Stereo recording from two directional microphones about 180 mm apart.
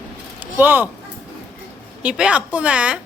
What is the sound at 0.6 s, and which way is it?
Speech, 10° right (ahead or behind).